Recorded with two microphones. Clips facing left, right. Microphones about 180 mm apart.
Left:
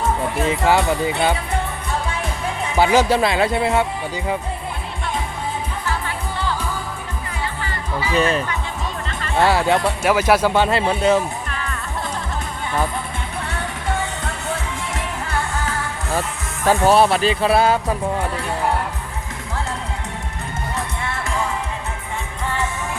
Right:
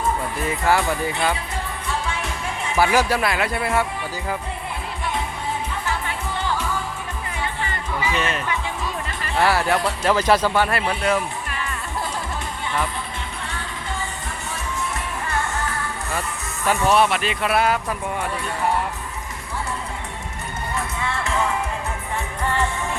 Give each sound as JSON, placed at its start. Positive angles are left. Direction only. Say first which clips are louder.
{"t": 0.4, "sound": "speech", "louder": "left 3 dB", "side_deg": 20}
{"t": 2.7, "sound": "speech", "louder": "left 3 dB", "side_deg": 20}
{"t": 7.6, "sound": "music", "louder": "right 1 dB", "side_deg": -20}
{"t": 8.1, "sound": "speech", "louder": "left 9 dB", "side_deg": 35}
{"t": 9.4, "sound": "speech", "louder": "left 3 dB", "side_deg": 20}
{"t": 10.0, "sound": "speech", "louder": "even", "side_deg": 10}
{"t": 10.5, "sound": "speech", "louder": "left 3 dB", "side_deg": 20}
{"t": 16.6, "sound": "speech", "louder": "left 4 dB", "side_deg": 35}